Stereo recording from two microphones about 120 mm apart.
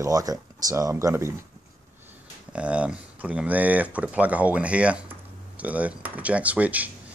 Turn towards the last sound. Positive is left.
turn(degrees=-10)  # may be behind; listen again after turning